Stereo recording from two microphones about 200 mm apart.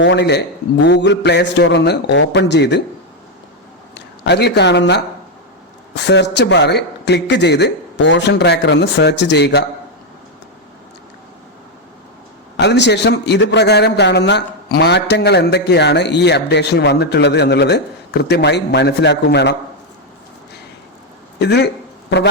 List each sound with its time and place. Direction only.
0.0 s a man's voice: 60° left (ahead or behind)
3.9 s a man's voice: 55° left (ahead or behind)
12.5 s a man's voice: 60° left (ahead or behind)
21.3 s speech: 55° left (ahead or behind)